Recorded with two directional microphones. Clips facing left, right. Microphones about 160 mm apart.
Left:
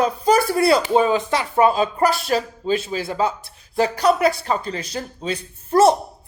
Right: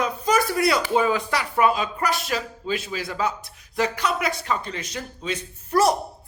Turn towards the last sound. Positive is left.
turn(degrees=25)  # may be behind; listen again after turning